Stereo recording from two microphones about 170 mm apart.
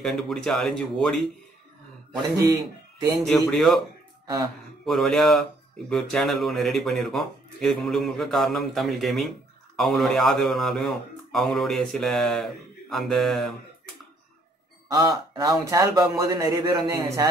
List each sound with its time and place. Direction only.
0.0 s speech: centre (ahead or behind)
3.3 s speech: centre (ahead or behind)
4.8 s speech: centre (ahead or behind)
14.9 s a man's voice: 25° right (ahead or behind)